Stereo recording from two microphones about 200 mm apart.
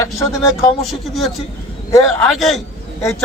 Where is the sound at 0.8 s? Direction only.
Centre (ahead or behind).